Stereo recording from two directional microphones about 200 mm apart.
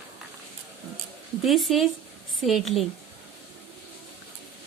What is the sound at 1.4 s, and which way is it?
Speech, centre (ahead or behind).